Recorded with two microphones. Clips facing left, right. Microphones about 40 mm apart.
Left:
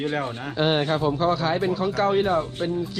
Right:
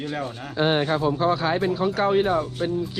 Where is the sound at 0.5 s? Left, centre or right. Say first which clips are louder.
Right 1 dB; left.